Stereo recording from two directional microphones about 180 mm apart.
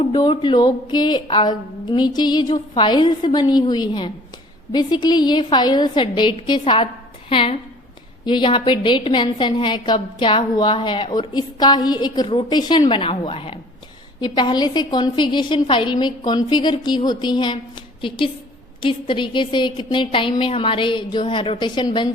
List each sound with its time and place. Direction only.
0.0 s a woman's voice: 25° left (ahead or behind)
18.8 s a woman's voice: 30° left (ahead or behind)